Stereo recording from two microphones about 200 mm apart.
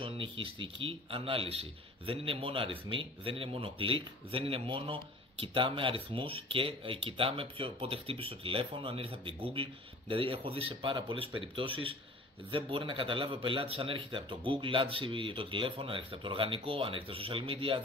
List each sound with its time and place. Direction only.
0.0 s speech: 25° right (ahead or behind)